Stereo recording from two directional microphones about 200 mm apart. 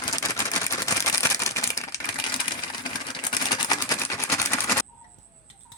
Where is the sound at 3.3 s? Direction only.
20° left (ahead or behind).